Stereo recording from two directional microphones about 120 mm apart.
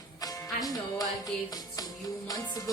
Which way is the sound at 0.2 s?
30° left (ahead or behind).